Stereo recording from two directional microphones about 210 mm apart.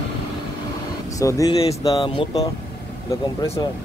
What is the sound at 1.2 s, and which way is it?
Speech, 15° left (ahead or behind).